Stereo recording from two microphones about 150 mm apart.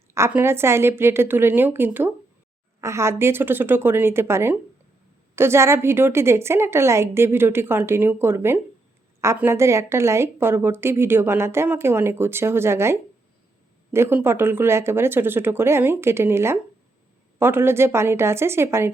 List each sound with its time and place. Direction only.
0.1 s a woman's voice: 15° right (ahead or behind)